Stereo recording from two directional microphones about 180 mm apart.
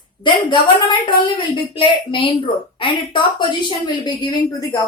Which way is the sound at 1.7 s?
30° left (ahead or behind).